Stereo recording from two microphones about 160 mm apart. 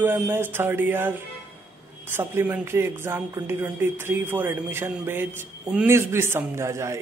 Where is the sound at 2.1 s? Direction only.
15° right (ahead or behind).